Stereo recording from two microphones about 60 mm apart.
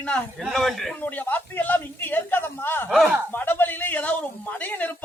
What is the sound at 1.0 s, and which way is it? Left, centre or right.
Speech, left.